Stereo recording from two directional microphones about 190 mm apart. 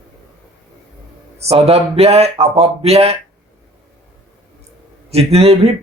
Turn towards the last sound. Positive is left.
turn(degrees=-35)  # may be behind; listen again after turning